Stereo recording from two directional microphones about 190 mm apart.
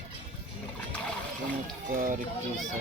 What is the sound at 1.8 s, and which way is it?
Run, 45° right (ahead or behind).